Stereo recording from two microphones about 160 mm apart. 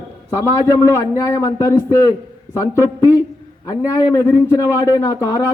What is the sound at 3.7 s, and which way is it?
Speech, 20° left (ahead or behind).